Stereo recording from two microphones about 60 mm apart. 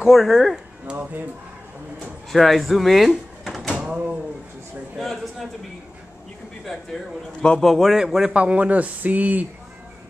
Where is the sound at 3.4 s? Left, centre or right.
Centre.